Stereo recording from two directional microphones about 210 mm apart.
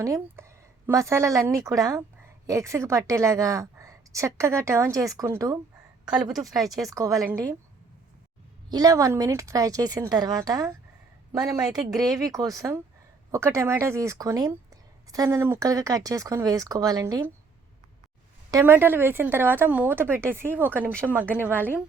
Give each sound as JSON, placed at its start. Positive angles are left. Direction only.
{"t": 0.0, "sound": "a woman's voice", "side_deg": -15}
{"t": 6.7, "sound": "a woman's voice", "side_deg": -15}
{"t": 8.7, "sound": "a woman's voice", "side_deg": -15}
{"t": 18.5, "sound": "a woman's voice", "side_deg": -10}